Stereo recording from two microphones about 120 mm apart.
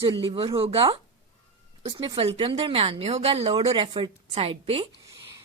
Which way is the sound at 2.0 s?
50° right (ahead or behind).